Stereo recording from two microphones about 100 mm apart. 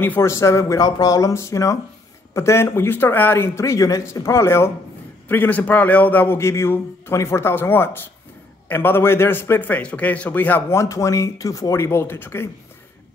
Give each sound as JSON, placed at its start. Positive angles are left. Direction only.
{"t": 0.0, "sound": "a man's voice", "side_deg": 20}
{"t": 0.8, "sound": "a man's voice", "side_deg": 40}
{"t": 10.8, "sound": "speech", "side_deg": 30}